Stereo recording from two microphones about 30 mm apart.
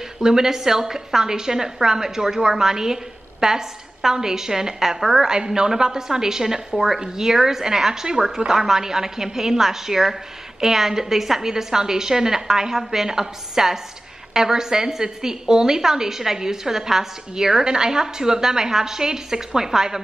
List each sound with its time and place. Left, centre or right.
0.2 s a woman's voice: centre